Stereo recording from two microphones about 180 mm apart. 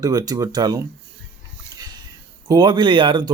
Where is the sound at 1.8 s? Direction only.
25° right (ahead or behind).